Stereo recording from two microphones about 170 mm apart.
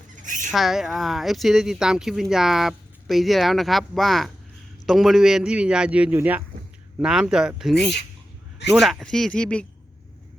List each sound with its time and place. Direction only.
0.2 s bird: 50° right (ahead or behind)
0.5 s speech: centre (ahead or behind)